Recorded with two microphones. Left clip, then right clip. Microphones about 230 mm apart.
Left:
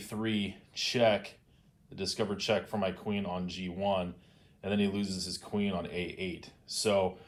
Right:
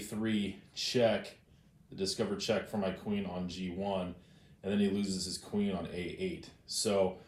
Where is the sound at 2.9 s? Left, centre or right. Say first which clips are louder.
Left 3 dB; left.